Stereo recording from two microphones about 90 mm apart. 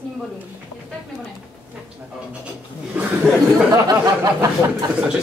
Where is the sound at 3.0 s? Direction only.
15° right (ahead or behind).